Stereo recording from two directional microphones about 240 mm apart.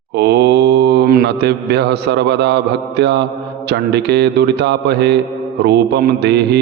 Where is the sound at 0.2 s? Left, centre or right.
Right.